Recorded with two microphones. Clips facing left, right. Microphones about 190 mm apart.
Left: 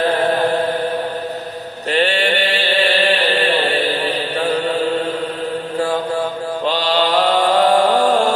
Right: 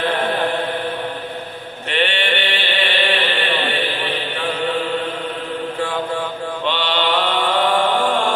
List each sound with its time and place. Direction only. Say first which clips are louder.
0.0 s chant: left 4 dB; 40° left (ahead or behind)
1.9 s chant: left 4 dB; 40° left (ahead or behind)
6.6 s mantra: left 4 dB; 40° left (ahead or behind)